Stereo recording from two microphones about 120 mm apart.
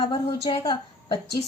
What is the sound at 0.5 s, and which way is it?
Speech, 50° left (ahead or behind).